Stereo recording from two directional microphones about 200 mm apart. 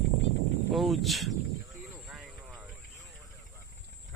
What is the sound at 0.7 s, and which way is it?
Speech, centre (ahead or behind).